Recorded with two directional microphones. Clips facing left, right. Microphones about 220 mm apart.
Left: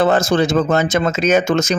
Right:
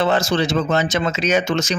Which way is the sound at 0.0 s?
50° left (ahead or behind).